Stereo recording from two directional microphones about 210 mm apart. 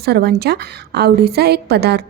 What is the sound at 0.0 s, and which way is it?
A woman's voice, 50° right (ahead or behind).